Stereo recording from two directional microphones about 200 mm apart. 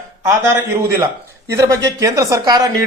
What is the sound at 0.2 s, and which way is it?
Speech, 15° right (ahead or behind).